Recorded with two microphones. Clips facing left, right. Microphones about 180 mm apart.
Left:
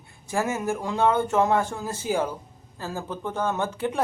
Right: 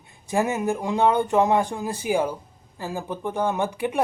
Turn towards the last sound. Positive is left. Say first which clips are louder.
# right 2 dB
turn(degrees=-15)  # may be behind; listen again after turning